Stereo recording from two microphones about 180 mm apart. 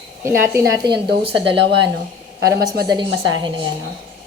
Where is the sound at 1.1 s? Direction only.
70° right (ahead or behind).